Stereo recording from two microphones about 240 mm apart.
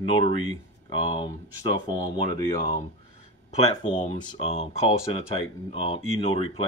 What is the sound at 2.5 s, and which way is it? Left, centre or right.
Speech, centre.